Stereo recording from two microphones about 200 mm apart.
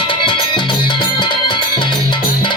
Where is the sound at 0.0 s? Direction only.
25° left (ahead or behind).